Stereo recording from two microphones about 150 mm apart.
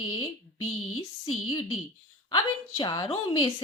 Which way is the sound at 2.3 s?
30° left (ahead or behind).